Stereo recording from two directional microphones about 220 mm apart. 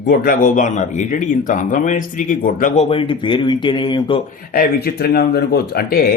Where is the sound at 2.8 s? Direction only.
25° left (ahead or behind).